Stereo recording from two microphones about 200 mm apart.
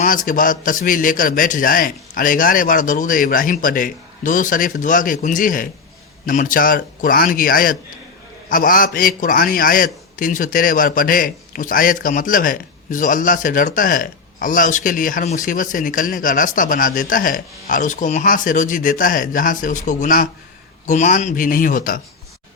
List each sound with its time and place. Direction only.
0.0 s a man's voice: 40° left (ahead or behind)